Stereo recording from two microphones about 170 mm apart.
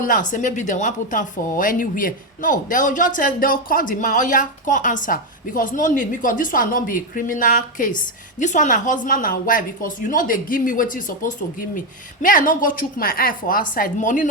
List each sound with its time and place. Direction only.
0.0 s a woman's voice: 50° left (ahead or behind)